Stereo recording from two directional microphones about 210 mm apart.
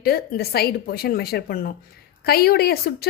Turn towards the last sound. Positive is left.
turn(degrees=50)  # may be behind; listen again after turning